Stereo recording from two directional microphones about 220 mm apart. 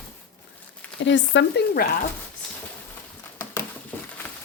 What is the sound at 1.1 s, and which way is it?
Stir, 55° left (ahead or behind).